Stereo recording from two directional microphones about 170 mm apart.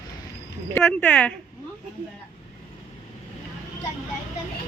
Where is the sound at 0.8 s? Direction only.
5° left (ahead or behind).